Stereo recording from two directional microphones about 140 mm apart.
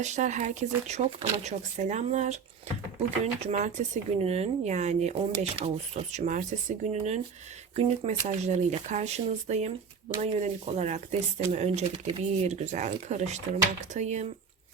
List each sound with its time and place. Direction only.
0.0 s speech: 60° right (ahead or behind)
3.4 s speech: 55° right (ahead or behind)